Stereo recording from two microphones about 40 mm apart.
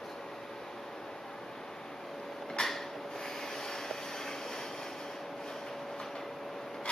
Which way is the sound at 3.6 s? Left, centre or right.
Centre.